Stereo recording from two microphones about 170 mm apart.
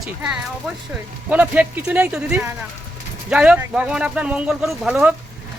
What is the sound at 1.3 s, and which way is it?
Speech, 10° right (ahead or behind).